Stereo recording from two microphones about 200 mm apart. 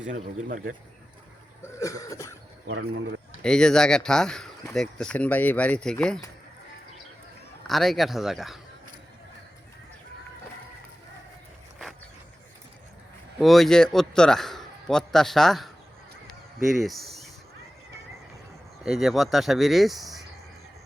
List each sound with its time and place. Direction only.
0.1 s speech: 40° right (ahead or behind)
1.6 s cough: 15° left (ahead or behind)
3.4 s a man's voice: 5° left (ahead or behind)
7.7 s a man's voice: centre (ahead or behind)
13.4 s a man's voice: centre (ahead or behind)
16.2 s honk: centre (ahead or behind)
18.8 s a man's voice: centre (ahead or behind)